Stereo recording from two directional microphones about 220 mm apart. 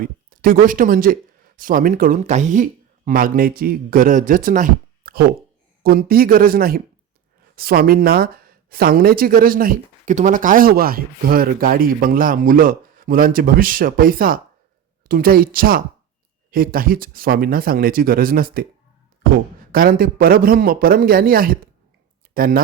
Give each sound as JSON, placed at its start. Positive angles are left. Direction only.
{"t": 0.0, "sound": "speech", "side_deg": -40}